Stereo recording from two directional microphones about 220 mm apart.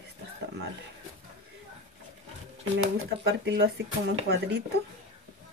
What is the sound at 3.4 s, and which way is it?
Speech, 50° right (ahead or behind).